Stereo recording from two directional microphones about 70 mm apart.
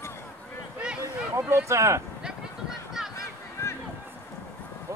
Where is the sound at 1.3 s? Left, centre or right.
Right.